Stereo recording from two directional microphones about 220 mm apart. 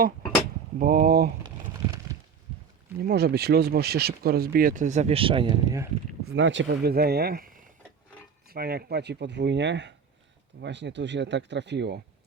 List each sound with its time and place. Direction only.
0.8 s speech: 45° right (ahead or behind)
3.0 s speech: 45° right (ahead or behind); by 5.9 s 15° right (ahead or behind)
6.2 s speech: 55° right (ahead or behind)